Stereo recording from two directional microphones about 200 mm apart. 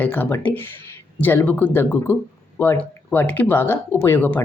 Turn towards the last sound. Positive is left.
turn(degrees=10)  # may be behind; listen again after turning